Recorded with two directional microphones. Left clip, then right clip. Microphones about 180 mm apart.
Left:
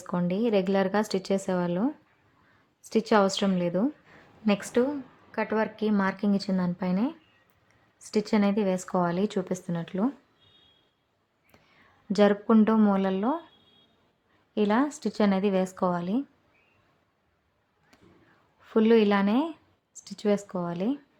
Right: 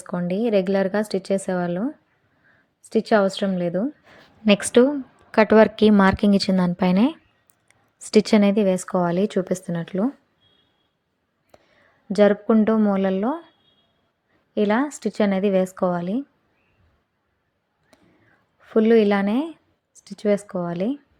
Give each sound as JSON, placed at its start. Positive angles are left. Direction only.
{"t": 0.0, "sound": "speech", "side_deg": -15}
{"t": 2.9, "sound": "speech", "side_deg": -15}
{"t": 4.0, "sound": "a woman's voice", "side_deg": -30}
{"t": 11.5, "sound": "a sound", "side_deg": -20}
{"t": 12.6, "sound": "speech", "side_deg": -20}
{"t": 14.5, "sound": "speech", "side_deg": -20}
{"t": 18.6, "sound": "speech", "side_deg": -15}